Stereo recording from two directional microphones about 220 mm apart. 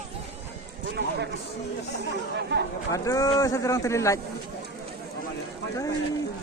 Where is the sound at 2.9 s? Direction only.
15° left (ahead or behind).